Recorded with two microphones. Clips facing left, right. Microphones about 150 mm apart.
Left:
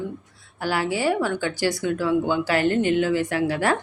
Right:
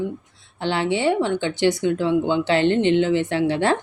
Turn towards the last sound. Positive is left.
turn(degrees=-25)  # may be behind; listen again after turning